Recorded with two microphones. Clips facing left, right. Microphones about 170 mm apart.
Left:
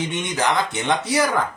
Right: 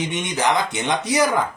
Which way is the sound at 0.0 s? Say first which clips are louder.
Right 1 dB; 15° right (ahead or behind).